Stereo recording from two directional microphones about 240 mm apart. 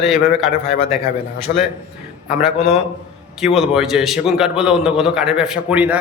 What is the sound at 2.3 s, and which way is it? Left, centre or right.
A man's voice, centre.